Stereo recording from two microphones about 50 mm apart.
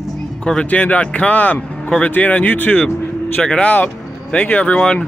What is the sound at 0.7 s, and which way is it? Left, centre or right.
Speech, left.